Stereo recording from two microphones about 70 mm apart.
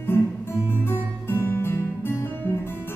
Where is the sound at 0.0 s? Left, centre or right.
Left.